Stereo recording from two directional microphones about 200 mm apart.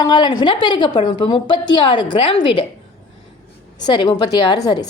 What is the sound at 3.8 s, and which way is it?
A woman's voice, 25° left (ahead or behind).